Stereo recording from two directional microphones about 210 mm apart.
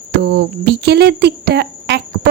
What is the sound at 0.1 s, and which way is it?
Speech, 50° right (ahead or behind).